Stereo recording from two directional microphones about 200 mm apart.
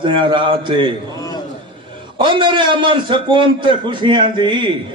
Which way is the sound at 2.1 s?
25° right (ahead or behind).